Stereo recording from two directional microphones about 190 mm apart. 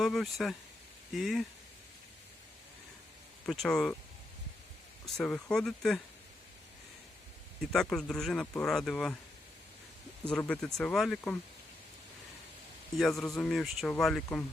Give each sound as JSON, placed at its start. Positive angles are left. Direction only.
{"t": 0.0, "sound": "speech", "side_deg": 0}
{"t": 3.4, "sound": "speech", "side_deg": 5}
{"t": 5.0, "sound": "speech", "side_deg": 5}
{"t": 7.6, "sound": "speech", "side_deg": 0}
{"t": 10.2, "sound": "speech", "side_deg": 5}
{"t": 13.0, "sound": "speech", "side_deg": 0}